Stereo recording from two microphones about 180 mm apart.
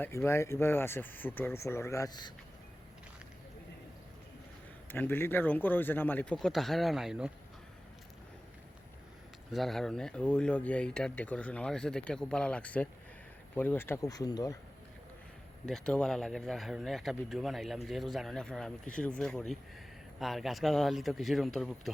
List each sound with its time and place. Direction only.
0.0 s speech: 15° left (ahead or behind)
4.9 s speech: 10° left (ahead or behind)
9.5 s speech: centre (ahead or behind); by 14.6 s 20° left (ahead or behind)
15.6 s speech: 5° left (ahead or behind)